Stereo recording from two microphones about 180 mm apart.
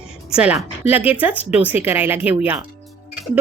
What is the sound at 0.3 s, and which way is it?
Sizzle, 5° right (ahead or behind).